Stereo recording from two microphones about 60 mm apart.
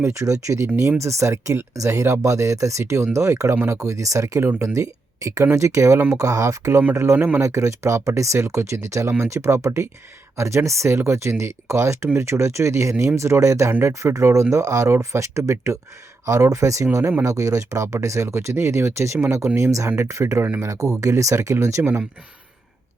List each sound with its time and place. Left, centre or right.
0.0 s speech: right
6.1 s speech: right
6.9 s speech: right
7.2 s speech: right
7.4 s speech: right
14.9 s speech: right
17.2 s speech: right